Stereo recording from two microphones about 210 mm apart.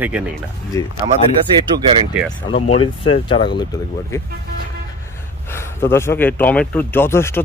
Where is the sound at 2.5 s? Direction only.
25° left (ahead or behind).